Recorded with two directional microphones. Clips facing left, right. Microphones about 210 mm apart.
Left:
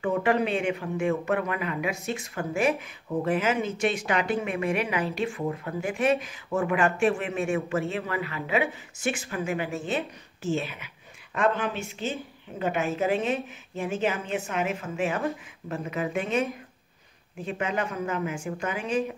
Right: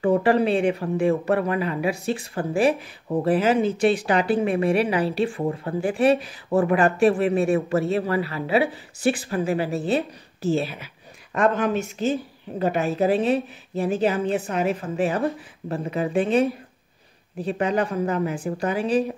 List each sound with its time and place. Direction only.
0.0 s speech: 35° right (ahead or behind)